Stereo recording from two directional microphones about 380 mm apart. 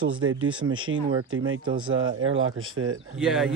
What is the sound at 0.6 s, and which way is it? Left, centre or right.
Speech, right.